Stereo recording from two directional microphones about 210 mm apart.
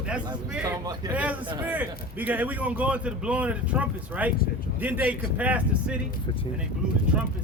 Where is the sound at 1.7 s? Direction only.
10° right (ahead or behind).